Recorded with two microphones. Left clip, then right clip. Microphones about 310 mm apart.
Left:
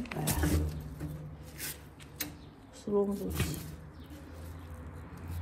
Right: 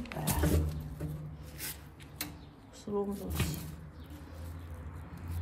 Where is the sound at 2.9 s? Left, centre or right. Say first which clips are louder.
Left 5 dB; centre.